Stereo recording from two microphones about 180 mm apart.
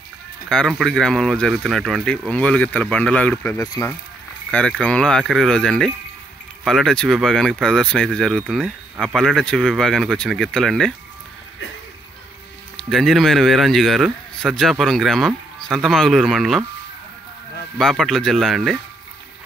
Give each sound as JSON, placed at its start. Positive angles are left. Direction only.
{"t": 0.5, "sound": "speech", "side_deg": 5}
{"t": 3.5, "sound": "speech", "side_deg": 20}
{"t": 4.5, "sound": "speech", "side_deg": 5}
{"t": 12.7, "sound": "speech", "side_deg": 0}
{"t": 17.7, "sound": "speech", "side_deg": 0}